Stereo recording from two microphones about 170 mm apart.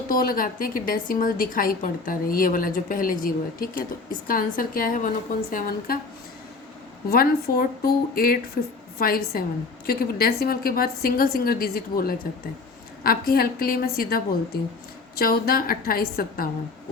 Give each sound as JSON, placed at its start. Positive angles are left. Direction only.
{"t": 0.1, "sound": "a woman's voice", "side_deg": 55}
{"t": 7.1, "sound": "a woman's voice", "side_deg": 60}